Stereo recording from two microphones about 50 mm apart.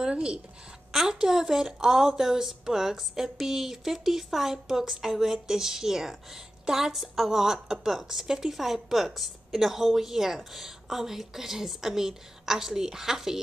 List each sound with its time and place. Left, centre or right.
0.0 s a woman's voice: centre